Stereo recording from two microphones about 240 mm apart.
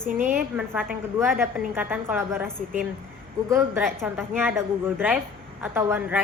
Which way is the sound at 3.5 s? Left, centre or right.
Centre.